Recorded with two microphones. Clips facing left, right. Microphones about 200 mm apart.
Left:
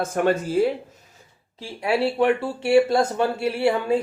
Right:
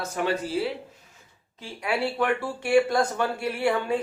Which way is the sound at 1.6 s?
30° left (ahead or behind).